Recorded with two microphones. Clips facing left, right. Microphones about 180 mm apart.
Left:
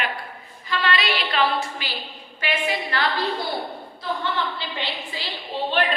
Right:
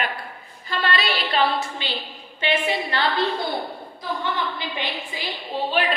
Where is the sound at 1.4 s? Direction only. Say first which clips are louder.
Right 1 dB; 25° right (ahead or behind).